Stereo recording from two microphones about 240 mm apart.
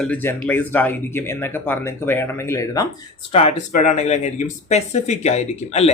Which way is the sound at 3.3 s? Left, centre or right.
Left.